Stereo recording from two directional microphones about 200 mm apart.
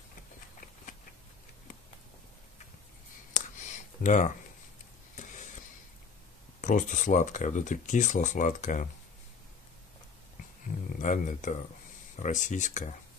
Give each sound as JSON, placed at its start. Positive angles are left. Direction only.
{"t": 4.0, "sound": "speech", "side_deg": 40}
{"t": 5.1, "sound": "a sound", "side_deg": 40}
{"t": 6.6, "sound": "speech", "side_deg": 40}
{"t": 11.0, "sound": "speech", "side_deg": 40}